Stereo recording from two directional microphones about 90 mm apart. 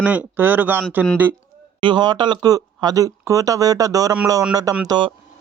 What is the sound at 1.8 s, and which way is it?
Speech, 55° right (ahead or behind).